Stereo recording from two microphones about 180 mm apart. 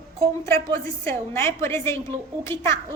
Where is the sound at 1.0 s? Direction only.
15° left (ahead or behind).